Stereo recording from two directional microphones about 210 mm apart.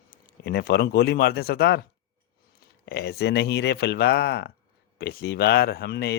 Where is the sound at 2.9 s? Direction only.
50° left (ahead or behind).